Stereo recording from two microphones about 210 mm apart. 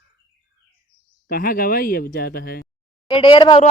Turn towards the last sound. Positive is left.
turn(degrees=25)  # may be behind; listen again after turning